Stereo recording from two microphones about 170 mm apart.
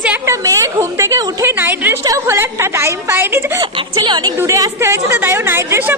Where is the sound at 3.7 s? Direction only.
25° right (ahead or behind); by 5.9 s 10° right (ahead or behind).